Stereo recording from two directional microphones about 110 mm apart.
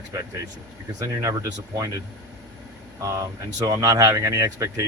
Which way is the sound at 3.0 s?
30° right (ahead or behind).